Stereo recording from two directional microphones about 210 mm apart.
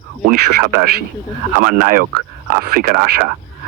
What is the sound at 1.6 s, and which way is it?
Speech, 40° right (ahead or behind).